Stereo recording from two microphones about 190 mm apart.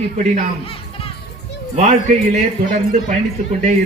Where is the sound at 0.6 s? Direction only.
30° left (ahead or behind).